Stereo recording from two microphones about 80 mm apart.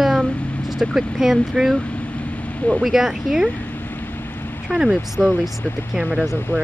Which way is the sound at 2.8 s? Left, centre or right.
Centre.